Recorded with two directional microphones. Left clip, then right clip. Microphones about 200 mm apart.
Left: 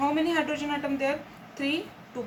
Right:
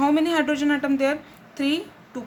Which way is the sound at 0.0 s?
55° right (ahead or behind).